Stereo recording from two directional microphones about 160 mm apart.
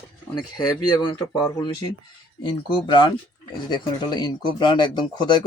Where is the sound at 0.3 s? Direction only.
25° left (ahead or behind).